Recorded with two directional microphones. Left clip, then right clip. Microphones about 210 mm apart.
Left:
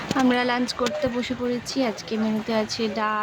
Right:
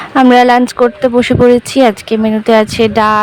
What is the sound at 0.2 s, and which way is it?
Speech, 45° right (ahead or behind).